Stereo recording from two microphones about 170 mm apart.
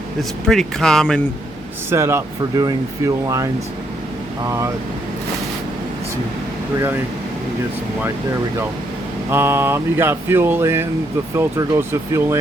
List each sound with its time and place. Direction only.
0.2 s speech: centre (ahead or behind)
1.9 s speech: 15° right (ahead or behind)
9.3 s speech: 15° right (ahead or behind)